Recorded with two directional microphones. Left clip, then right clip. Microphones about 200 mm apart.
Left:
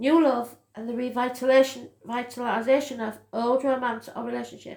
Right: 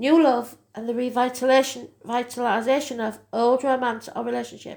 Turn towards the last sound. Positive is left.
turn(degrees=-40)  # may be behind; listen again after turning